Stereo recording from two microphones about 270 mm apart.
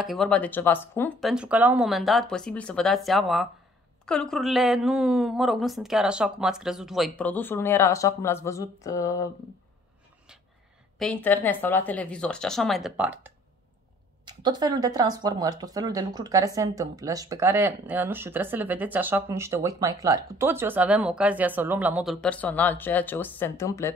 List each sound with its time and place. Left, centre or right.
0.0 s speech: centre
11.0 s speech: centre
14.2 s speech: centre